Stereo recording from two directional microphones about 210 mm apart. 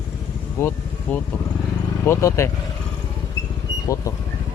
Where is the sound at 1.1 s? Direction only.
5° left (ahead or behind).